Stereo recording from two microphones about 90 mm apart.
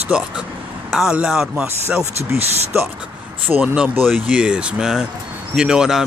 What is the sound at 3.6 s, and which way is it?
Speech, 15° right (ahead or behind).